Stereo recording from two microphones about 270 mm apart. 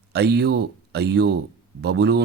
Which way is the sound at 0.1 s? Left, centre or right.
Right.